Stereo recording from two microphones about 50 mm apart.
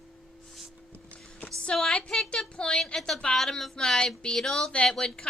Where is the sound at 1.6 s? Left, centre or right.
Centre.